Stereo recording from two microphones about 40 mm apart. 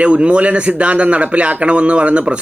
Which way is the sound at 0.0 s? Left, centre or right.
Right.